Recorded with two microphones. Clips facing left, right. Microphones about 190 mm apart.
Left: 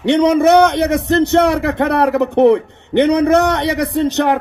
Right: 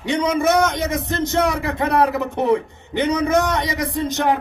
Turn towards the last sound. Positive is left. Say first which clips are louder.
# left 5 dB
turn(degrees=65)  # may be behind; listen again after turning